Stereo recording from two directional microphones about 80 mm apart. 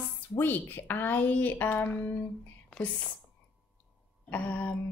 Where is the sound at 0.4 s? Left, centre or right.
Left.